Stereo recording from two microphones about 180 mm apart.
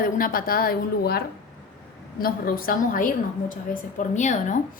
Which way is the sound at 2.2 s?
55° left (ahead or behind).